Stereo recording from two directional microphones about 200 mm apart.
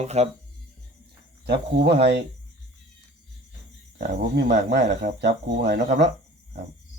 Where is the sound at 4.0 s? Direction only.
55° right (ahead or behind).